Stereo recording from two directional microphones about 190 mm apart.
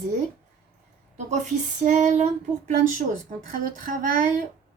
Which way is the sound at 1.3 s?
40° right (ahead or behind).